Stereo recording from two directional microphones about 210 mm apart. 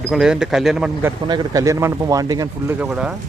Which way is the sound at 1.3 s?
20° right (ahead or behind).